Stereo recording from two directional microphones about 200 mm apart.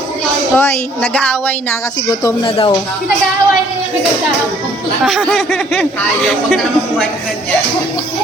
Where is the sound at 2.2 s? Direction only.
25° left (ahead or behind).